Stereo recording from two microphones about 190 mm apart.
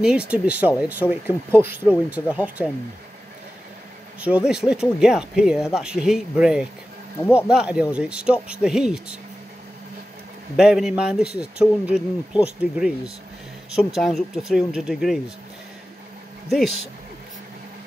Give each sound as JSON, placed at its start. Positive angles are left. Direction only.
{"t": 0.0, "sound": "speech", "side_deg": -5}
{"t": 4.2, "sound": "speech", "side_deg": -5}
{"t": 10.5, "sound": "speech", "side_deg": 0}
{"t": 16.4, "sound": "speech", "side_deg": 0}